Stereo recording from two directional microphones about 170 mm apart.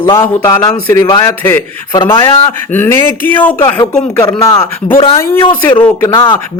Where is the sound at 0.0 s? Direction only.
15° left (ahead or behind).